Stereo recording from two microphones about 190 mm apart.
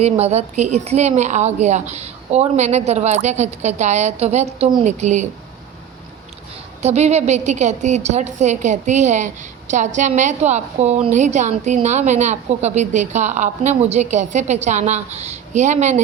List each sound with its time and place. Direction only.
0.0 s a woman's voice: 35° right (ahead or behind)
6.8 s a woman's voice: 35° right (ahead or behind)